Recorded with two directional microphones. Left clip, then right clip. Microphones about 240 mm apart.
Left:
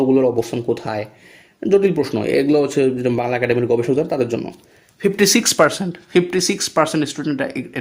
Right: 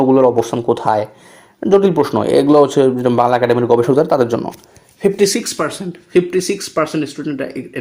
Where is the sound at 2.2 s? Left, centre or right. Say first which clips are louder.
Right 6 dB; right.